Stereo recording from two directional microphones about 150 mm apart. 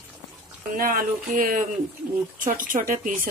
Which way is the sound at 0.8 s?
70° right (ahead or behind).